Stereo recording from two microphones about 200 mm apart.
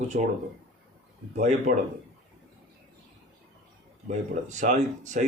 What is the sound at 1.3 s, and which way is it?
Speech, 35° right (ahead or behind).